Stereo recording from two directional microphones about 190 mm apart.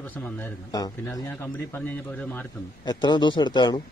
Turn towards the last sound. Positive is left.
turn(degrees=25)  # may be behind; listen again after turning